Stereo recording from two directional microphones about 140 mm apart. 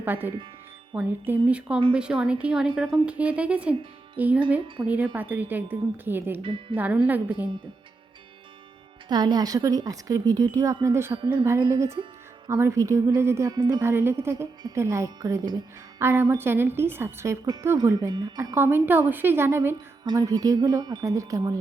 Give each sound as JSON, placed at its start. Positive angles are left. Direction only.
{"t": 0.0, "sound": "a woman's voice", "side_deg": -15}
{"t": 6.4, "sound": "speech", "side_deg": -40}
{"t": 6.7, "sound": "a woman's voice", "side_deg": -10}
{"t": 9.0, "sound": "speech", "side_deg": -30}
{"t": 11.2, "sound": "speech", "side_deg": -35}
{"t": 12.5, "sound": "a woman's voice", "side_deg": -20}
{"t": 18.5, "sound": "a woman's voice", "side_deg": -15}